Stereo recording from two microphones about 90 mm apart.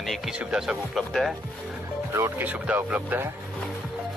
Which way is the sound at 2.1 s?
25° right (ahead or behind).